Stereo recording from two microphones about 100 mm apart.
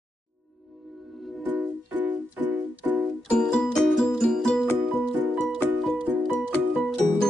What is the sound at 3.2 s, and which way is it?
Music, 5° left (ahead or behind).